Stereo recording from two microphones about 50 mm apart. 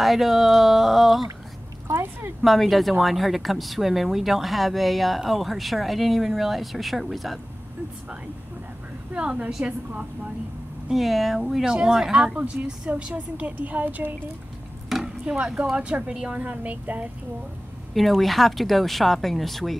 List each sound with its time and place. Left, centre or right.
0.0 s speech: centre
2.4 s speech: centre
9.1 s speech: right
10.9 s speech: centre
12.6 s a woman's voice: right
14.9 s a sound: centre
15.7 s speech: right
17.9 s speech: centre